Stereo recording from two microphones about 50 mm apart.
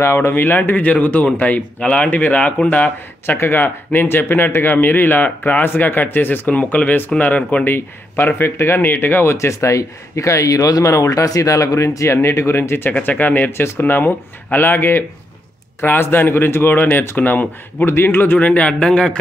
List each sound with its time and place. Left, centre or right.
0.0 s speech: left
0.3 s speech: left
3.3 s speech: left
6.5 s speech: left
7.6 s speech: left
8.5 s speech: left
9.3 s speech: left
13.0 s speech: left
13.5 s speech: left
17.8 s speech: left
18.4 s speech: left
18.8 s speech: centre